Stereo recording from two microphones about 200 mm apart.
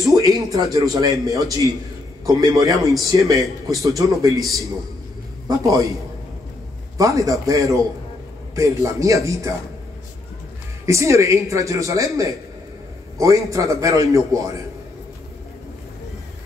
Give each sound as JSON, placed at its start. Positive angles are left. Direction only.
{"t": 0.0, "sound": "a man's voice", "side_deg": -20}
{"t": 7.0, "sound": "a man's voice", "side_deg": -15}
{"t": 10.9, "sound": "a man's voice", "side_deg": -15}